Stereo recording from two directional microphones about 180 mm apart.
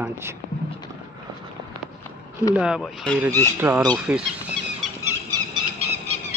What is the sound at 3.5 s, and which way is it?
Speech, 15° right (ahead or behind).